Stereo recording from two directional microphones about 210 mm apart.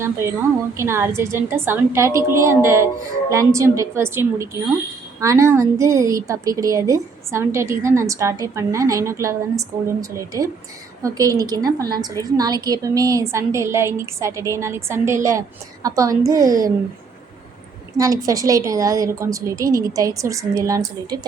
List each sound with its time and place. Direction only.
0.0 s a woman's voice: 10° right (ahead or behind)
17.9 s a woman's voice: 15° right (ahead or behind)